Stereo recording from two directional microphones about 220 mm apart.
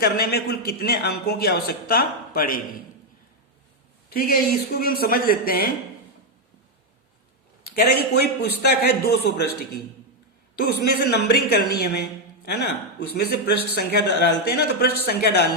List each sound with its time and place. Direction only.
0.0 s a man's voice: 45° left (ahead or behind)
4.1 s a man's voice: 45° left (ahead or behind)
7.8 s a man's voice: 45° left (ahead or behind)
11.1 s a man's voice: 45° left (ahead or behind)